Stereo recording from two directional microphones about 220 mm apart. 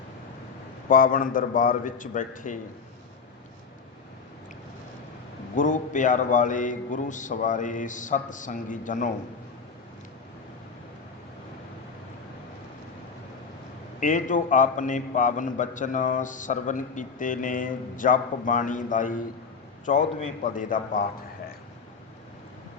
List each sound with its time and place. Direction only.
0.9 s a man's voice: 40° left (ahead or behind)
5.5 s a man's voice: 35° left (ahead or behind)
14.0 s a man's voice: 35° left (ahead or behind)